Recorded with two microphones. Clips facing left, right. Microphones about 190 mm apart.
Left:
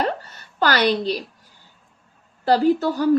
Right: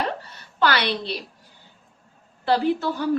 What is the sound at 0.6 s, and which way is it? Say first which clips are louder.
Speech: left 4 dB; 40° left (ahead or behind).